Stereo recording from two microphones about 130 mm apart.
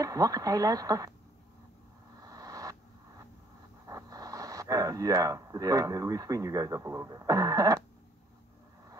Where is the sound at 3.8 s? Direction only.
25° right (ahead or behind).